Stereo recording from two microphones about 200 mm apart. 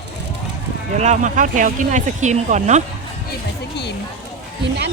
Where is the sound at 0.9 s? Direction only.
35° right (ahead or behind).